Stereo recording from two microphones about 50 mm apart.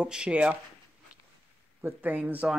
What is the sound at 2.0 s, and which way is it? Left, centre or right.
Speech, right.